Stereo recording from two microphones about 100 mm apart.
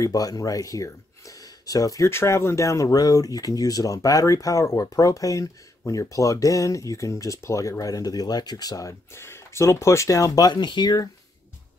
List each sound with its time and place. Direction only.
0.0 s speech: 35° left (ahead or behind)
9.1 s speech: 25° left (ahead or behind)
10.5 s speech: 50° left (ahead or behind)